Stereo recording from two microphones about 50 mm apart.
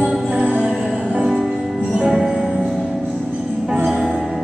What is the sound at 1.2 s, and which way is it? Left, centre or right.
Music, centre.